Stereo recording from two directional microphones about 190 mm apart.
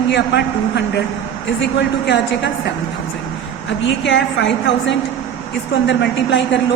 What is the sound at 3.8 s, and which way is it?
A woman's voice, 75° left (ahead or behind).